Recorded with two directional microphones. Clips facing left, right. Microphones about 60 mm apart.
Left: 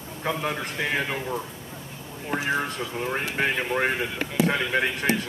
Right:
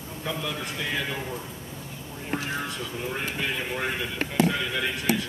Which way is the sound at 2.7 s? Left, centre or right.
Left.